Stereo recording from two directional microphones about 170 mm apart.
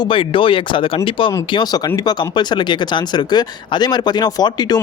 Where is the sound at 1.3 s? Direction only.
20° left (ahead or behind).